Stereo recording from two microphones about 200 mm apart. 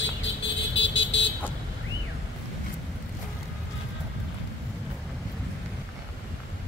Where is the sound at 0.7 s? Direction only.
70° left (ahead or behind).